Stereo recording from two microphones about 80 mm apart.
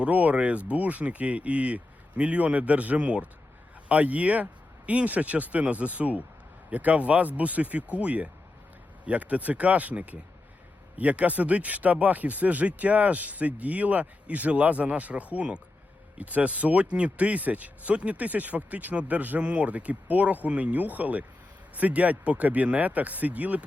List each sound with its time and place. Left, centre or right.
0.0 s speech: centre